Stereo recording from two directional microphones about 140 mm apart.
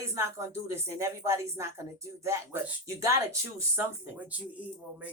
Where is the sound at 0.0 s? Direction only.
20° right (ahead or behind).